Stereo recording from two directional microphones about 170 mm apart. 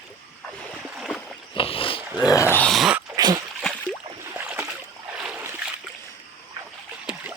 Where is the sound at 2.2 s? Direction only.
20° left (ahead or behind).